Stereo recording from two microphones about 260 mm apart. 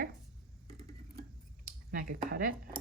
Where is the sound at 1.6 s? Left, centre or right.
Right.